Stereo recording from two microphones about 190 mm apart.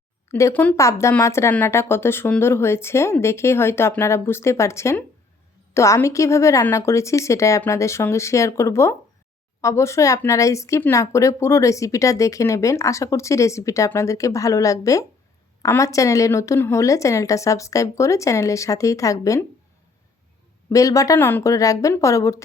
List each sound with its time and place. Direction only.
0.3 s speech: 15° left (ahead or behind)
20.7 s speech: 15° left (ahead or behind)